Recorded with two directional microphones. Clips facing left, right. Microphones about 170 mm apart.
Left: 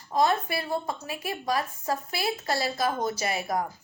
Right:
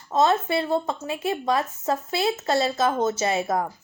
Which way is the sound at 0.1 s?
25° right (ahead or behind).